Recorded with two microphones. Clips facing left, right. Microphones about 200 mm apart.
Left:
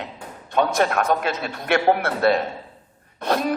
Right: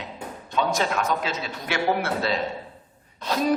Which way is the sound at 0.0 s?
55° left (ahead or behind).